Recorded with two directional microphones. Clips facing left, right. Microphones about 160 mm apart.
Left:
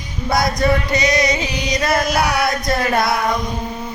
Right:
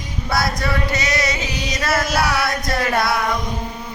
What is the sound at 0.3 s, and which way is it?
Female singing, 20° left (ahead or behind).